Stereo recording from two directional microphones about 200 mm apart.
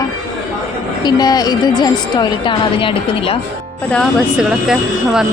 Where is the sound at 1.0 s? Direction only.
20° left (ahead or behind).